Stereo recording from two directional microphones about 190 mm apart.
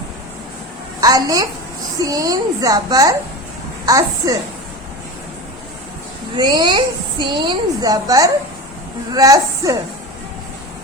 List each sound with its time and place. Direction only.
1.0 s a woman's voice: 20° right (ahead or behind)
6.3 s a woman's voice: 20° right (ahead or behind)